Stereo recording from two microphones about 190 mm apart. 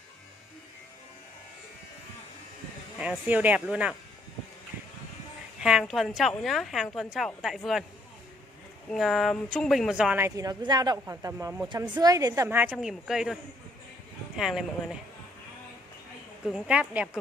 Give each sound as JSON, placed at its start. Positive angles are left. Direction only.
{"t": 3.0, "sound": "a woman's voice", "side_deg": -5}
{"t": 5.6, "sound": "speech", "side_deg": -5}
{"t": 8.9, "sound": "speech", "side_deg": 0}
{"t": 10.2, "sound": "a woman's voice", "side_deg": -20}
{"t": 16.4, "sound": "speech", "side_deg": -5}